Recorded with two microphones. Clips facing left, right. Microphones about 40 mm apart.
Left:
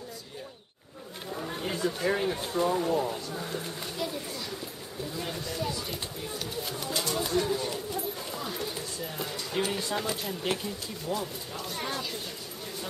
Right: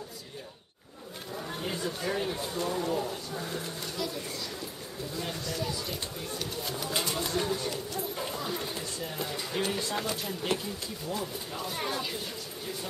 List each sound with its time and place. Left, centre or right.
1.3 s chatter: centre
2.0 s speech: centre
3.9 s a sound: centre
5.1 s a sound: centre
5.5 s speech: centre
6.9 s speech: centre
7.2 s speech: centre
8.4 s speech: centre
11.1 s speech: centre
11.5 s speech: centre